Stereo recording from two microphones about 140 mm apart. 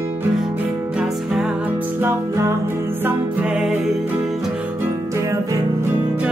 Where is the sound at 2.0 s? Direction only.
20° right (ahead or behind).